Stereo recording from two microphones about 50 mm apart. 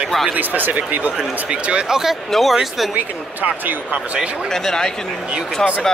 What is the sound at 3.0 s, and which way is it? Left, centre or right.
Speech, right.